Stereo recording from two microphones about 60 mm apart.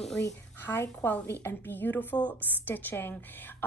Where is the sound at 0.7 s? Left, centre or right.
Left.